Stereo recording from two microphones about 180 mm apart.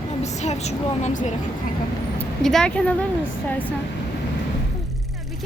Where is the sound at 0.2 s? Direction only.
40° left (ahead or behind).